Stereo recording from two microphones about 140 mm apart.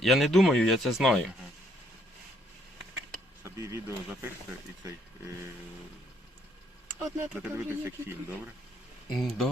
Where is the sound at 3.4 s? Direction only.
20° right (ahead or behind).